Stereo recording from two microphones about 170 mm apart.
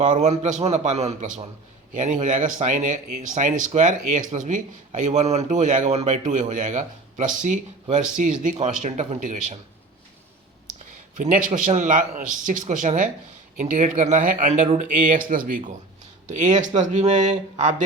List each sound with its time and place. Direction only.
0.0 s speech: 45° right (ahead or behind)
11.2 s speech: 50° right (ahead or behind)